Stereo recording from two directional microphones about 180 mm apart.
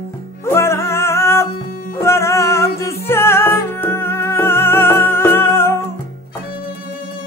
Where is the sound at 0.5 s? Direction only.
15° left (ahead or behind).